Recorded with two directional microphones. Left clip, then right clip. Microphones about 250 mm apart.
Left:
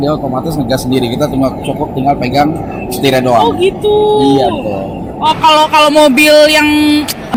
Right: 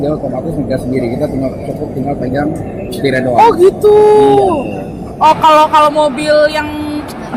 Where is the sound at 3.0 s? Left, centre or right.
Left.